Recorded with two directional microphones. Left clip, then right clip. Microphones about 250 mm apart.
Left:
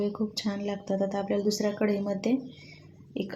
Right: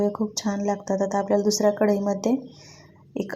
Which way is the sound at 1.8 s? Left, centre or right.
Centre.